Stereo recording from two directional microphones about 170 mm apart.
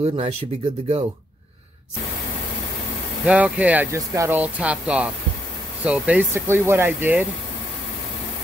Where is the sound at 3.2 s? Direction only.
5° right (ahead or behind).